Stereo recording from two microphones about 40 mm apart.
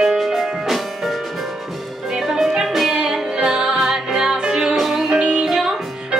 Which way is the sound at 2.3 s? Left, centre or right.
Centre.